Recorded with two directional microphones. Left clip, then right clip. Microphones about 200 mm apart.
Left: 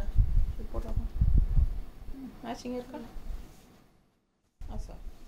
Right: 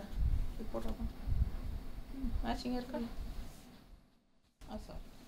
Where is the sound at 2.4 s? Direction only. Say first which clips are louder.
Left 3 dB; 15° left (ahead or behind).